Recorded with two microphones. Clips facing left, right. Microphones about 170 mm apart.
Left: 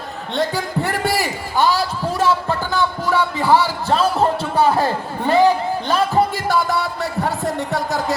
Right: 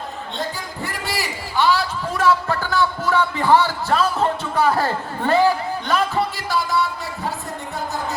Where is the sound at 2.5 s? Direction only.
15° left (ahead or behind).